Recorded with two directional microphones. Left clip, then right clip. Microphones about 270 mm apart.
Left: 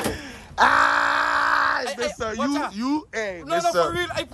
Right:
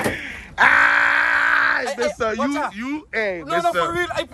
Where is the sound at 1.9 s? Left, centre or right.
Centre.